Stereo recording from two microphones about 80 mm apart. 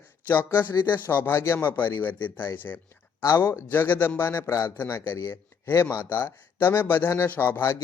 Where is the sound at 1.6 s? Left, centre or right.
Left.